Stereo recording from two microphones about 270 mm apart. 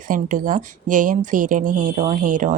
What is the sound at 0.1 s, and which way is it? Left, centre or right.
Speech, right.